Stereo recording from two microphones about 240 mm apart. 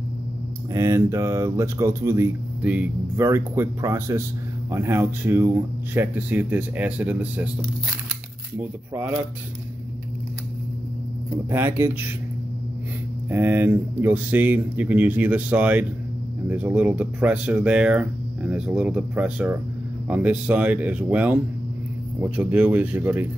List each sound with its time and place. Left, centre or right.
0.7 s speech: centre
8.5 s speech: centre
11.5 s speech: centre
13.3 s speech: centre